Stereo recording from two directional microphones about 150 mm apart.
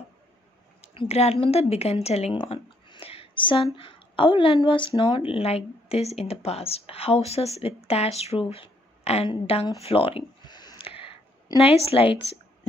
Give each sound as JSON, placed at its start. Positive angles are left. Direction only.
{"t": 0.9, "sound": "a woman's voice", "side_deg": 45}
{"t": 9.8, "sound": "a sound", "side_deg": 40}
{"t": 11.5, "sound": "a woman's voice", "side_deg": 40}